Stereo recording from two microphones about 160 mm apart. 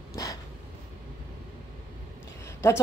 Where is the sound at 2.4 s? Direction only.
15° left (ahead or behind).